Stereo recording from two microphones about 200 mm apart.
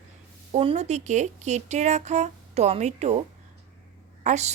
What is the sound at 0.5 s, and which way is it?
A woman's voice, 30° right (ahead or behind).